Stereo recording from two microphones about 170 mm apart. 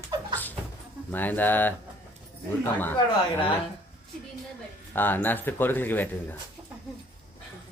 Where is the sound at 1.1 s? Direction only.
10° left (ahead or behind).